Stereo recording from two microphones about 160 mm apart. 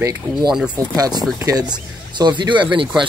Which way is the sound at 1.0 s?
25° right (ahead or behind).